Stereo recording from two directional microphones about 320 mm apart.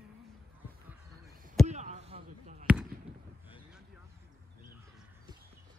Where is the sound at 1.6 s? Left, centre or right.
Right.